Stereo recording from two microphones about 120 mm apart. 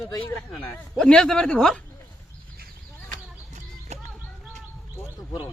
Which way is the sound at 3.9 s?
65° right (ahead or behind).